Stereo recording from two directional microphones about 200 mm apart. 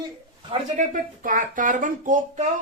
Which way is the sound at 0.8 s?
40° right (ahead or behind).